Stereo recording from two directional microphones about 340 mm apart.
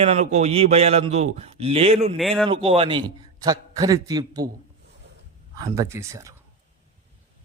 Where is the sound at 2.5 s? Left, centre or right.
Centre.